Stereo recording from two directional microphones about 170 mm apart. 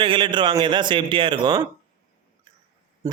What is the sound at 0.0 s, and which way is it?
A man's voice, 30° right (ahead or behind).